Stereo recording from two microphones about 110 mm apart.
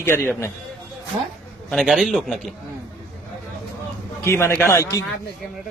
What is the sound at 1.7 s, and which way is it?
Speech, centre (ahead or behind).